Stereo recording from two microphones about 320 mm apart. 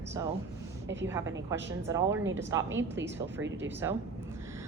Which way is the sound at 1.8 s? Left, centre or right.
Centre.